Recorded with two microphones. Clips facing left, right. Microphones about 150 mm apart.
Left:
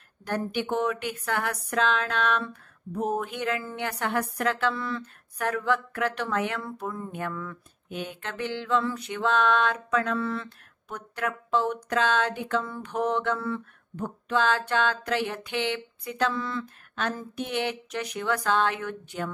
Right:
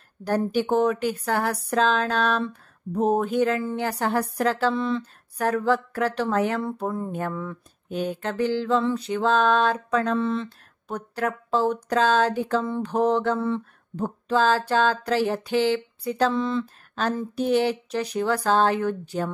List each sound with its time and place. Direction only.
0.2 s speech: 35° right (ahead or behind)
4.7 s speech: 20° right (ahead or behind)
5.0 s speech: 35° right (ahead or behind)
16.3 s speech: 20° right (ahead or behind)
16.9 s speech: 35° right (ahead or behind)